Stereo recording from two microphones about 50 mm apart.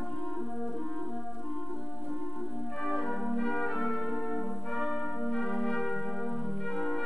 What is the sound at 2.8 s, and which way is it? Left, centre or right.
Music, centre.